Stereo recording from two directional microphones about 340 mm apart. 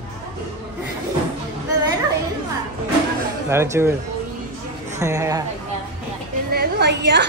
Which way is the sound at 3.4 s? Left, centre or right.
Centre.